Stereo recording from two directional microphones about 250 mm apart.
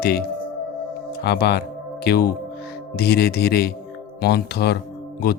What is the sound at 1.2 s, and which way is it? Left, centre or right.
Speech, left.